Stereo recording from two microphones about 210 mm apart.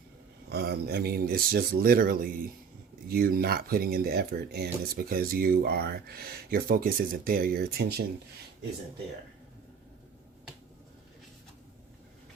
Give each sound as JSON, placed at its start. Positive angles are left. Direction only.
{"t": 0.5, "sound": "speech", "side_deg": -50}